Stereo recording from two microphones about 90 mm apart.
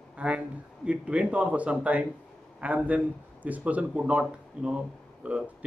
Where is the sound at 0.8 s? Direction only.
15° right (ahead or behind).